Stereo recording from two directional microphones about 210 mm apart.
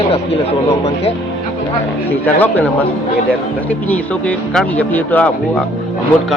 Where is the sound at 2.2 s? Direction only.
10° left (ahead or behind).